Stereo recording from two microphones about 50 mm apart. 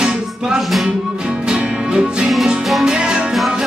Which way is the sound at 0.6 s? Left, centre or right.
Centre.